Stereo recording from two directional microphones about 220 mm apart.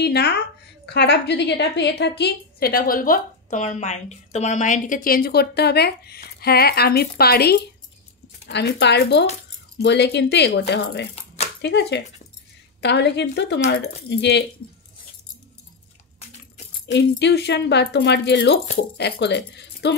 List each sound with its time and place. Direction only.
0.0 s a woman's voice: 45° left (ahead or behind)
16.8 s a woman's voice: 50° left (ahead or behind)